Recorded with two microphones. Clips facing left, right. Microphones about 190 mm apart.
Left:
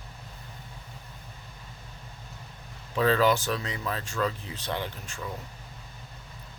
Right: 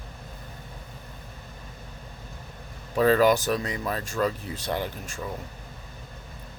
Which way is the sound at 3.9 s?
40° right (ahead or behind).